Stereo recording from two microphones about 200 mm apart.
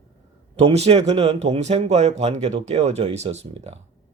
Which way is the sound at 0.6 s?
30° right (ahead or behind).